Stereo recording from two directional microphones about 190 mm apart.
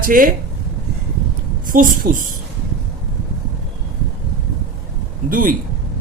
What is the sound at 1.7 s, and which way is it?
Speech, 45° right (ahead or behind).